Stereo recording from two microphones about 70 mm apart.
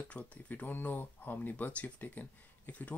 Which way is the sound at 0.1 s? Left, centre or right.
Left.